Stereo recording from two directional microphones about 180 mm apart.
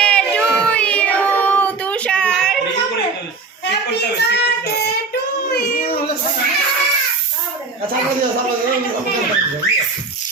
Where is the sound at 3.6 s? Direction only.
70° left (ahead or behind).